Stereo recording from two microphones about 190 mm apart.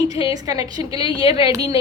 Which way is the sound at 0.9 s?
30° left (ahead or behind).